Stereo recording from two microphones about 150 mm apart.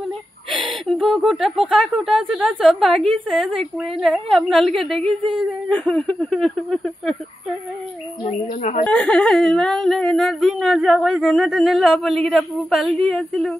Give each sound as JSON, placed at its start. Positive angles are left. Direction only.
{"t": 0.5, "sound": "a woman's voice", "side_deg": 0}
{"t": 8.3, "sound": "speech", "side_deg": 55}
{"t": 8.8, "sound": "a woman's voice", "side_deg": 5}